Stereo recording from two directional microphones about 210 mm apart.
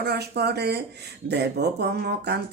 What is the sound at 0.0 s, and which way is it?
Speech, 50° right (ahead or behind).